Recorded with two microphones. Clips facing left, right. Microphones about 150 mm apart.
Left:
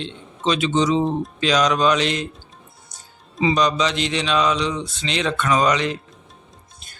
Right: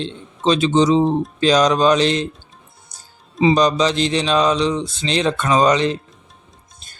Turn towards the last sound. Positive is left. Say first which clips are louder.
# right 4 dB
turn(degrees=-30)  # may be behind; listen again after turning